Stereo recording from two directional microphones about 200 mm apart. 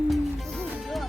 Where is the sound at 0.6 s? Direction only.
Centre (ahead or behind).